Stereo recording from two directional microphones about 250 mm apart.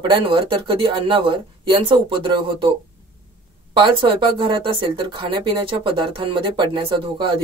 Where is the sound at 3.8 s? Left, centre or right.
Centre.